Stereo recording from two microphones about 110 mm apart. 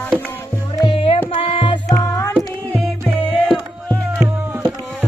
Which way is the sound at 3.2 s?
5° left (ahead or behind).